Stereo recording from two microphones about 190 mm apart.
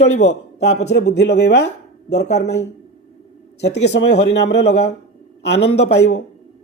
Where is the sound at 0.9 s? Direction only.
60° left (ahead or behind).